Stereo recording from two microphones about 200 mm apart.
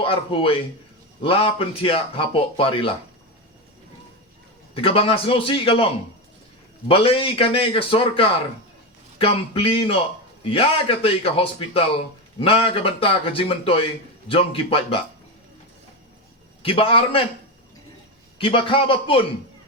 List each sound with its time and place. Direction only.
0.0 s a man's voice: 25° left (ahead or behind)
4.7 s a man's voice: 25° left (ahead or behind)
16.6 s a man's voice: 25° left (ahead or behind)
18.3 s a man's voice: 25° left (ahead or behind)